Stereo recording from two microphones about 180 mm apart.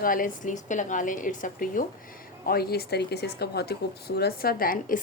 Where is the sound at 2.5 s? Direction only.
60° left (ahead or behind).